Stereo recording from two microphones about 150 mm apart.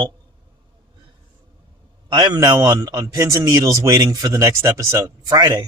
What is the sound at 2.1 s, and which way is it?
A man's voice, 30° right (ahead or behind).